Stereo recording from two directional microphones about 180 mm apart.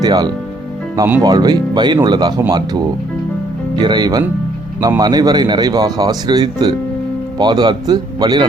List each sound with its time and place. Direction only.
0.0 s speech: 20° right (ahead or behind)
0.9 s speech: 10° right (ahead or behind)
1.2 s speech: 20° right (ahead or behind)